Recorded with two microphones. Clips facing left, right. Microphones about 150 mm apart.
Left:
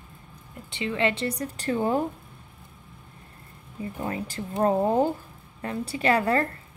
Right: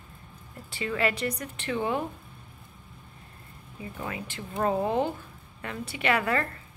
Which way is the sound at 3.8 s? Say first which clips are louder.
Left 5 dB; 40° left (ahead or behind).